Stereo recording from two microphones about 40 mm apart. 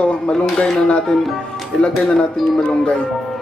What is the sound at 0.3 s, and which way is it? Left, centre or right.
Speech, centre.